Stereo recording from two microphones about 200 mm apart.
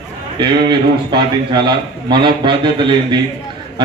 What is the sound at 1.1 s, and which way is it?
A man's voice, 25° right (ahead or behind).